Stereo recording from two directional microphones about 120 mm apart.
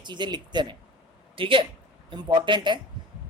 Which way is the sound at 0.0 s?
40° right (ahead or behind).